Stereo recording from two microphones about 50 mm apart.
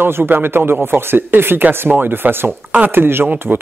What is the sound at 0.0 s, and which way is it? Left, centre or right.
A man's voice, right.